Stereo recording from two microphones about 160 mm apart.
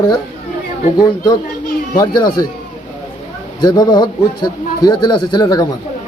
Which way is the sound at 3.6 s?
25° left (ahead or behind).